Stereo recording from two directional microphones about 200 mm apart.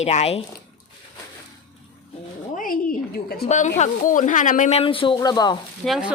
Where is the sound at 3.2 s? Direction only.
50° left (ahead or behind).